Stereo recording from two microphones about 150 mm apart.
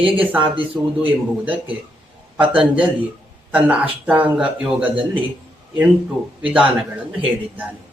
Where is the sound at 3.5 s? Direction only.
10° right (ahead or behind).